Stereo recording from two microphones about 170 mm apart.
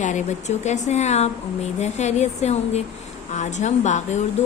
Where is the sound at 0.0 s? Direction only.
45° left (ahead or behind).